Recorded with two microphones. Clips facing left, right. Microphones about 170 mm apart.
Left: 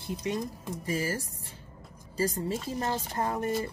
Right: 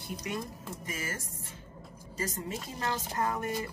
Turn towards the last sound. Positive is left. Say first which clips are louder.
# left 3 dB
turn(degrees=35)  # may be behind; listen again after turning